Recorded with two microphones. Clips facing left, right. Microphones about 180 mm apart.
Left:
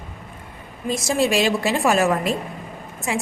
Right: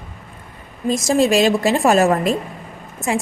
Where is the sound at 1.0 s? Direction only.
40° right (ahead or behind).